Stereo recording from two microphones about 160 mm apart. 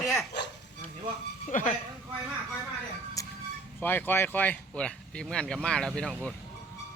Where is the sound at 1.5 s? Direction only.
55° left (ahead or behind).